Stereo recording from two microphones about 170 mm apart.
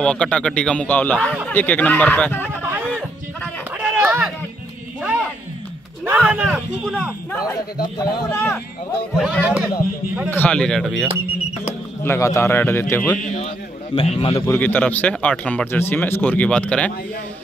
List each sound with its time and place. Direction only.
0.0 s speech: 5° left (ahead or behind)
2.6 s a sound: 10° right (ahead or behind)
3.7 s run: 10° right (ahead or behind)
6.0 s speech: 10° right (ahead or behind)
7.4 s a man's voice: 25° left (ahead or behind)
9.1 s speech: 5° right (ahead or behind)
10.3 s speech: 10° left (ahead or behind)
12.0 s speech: 15° left (ahead or behind)
13.9 s a man's voice: 35° left (ahead or behind)
14.4 s speech: 10° left (ahead or behind)